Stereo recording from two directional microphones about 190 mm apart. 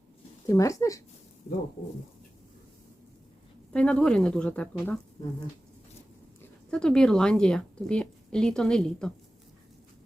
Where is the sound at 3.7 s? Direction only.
5° left (ahead or behind).